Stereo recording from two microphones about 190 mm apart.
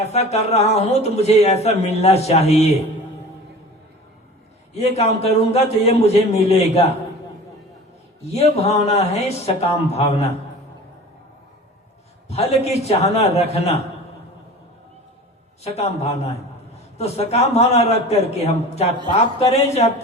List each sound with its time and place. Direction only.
0.1 s speech: 35° left (ahead or behind)
4.7 s speech: 35° left (ahead or behind)
8.2 s speech: 35° left (ahead or behind)
12.3 s speech: 35° left (ahead or behind)
15.6 s speech: 35° left (ahead or behind)